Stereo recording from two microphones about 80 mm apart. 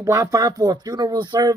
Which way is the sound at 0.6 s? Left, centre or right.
Right.